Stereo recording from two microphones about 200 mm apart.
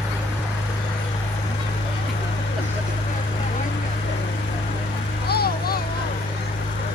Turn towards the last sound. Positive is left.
turn(degrees=50)  # may be behind; listen again after turning